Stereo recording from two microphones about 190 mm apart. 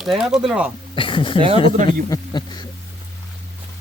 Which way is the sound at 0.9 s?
25° left (ahead or behind).